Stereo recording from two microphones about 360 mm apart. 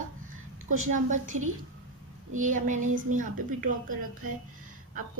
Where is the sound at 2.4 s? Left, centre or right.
Right.